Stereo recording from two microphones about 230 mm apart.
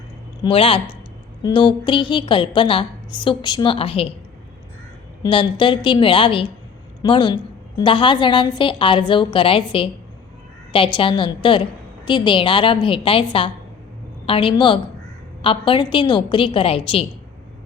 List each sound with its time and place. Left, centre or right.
0.4 s a woman's voice: left
5.2 s a woman's voice: left
10.9 s a woman's voice: left
14.3 s a woman's voice: left